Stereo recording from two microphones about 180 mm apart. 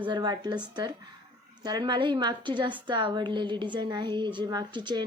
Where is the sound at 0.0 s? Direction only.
25° right (ahead or behind).